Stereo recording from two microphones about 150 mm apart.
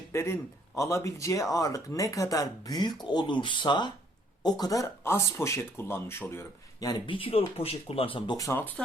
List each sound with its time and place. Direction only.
0.1 s a man's voice: 15° left (ahead or behind); by 8.4 s 35° left (ahead or behind)
8.4 s speech: 15° left (ahead or behind)